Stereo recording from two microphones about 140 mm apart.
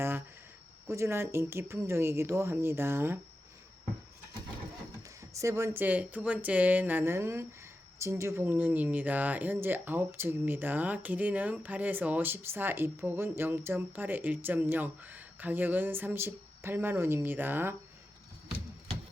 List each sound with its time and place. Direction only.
0.9 s speech: 20° right (ahead or behind)
5.0 s speech: 20° right (ahead or behind)